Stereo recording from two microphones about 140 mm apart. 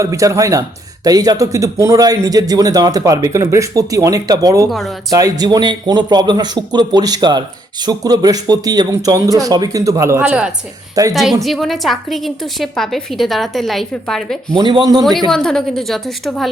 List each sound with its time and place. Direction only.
0.0 s a man's voice: 25° right (ahead or behind)
10.2 s a woman's voice: 5° right (ahead or behind)
14.6 s a man's voice: 30° right (ahead or behind)
15.3 s a woman's voice: 5° left (ahead or behind)